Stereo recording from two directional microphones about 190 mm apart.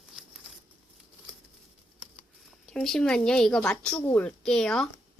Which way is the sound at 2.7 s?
5° left (ahead or behind).